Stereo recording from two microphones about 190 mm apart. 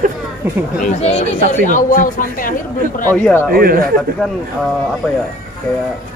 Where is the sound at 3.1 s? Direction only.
10° left (ahead or behind).